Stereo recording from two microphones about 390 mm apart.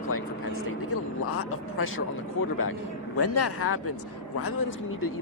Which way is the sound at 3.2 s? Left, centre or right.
Left.